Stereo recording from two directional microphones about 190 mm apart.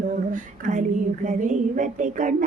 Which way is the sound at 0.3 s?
40° right (ahead or behind).